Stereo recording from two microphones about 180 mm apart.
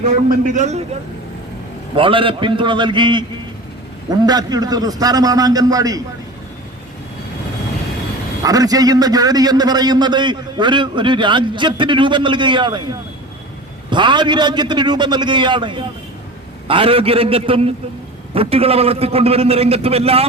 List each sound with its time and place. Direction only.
0.0 s a man's voice: 45° right (ahead or behind)
2.0 s a man's voice: 30° right (ahead or behind)
8.4 s a man's voice: 20° right (ahead or behind)
13.9 s a man's voice: 25° right (ahead or behind)